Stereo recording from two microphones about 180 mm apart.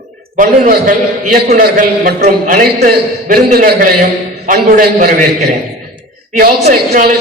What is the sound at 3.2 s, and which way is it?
A man's voice, 55° right (ahead or behind).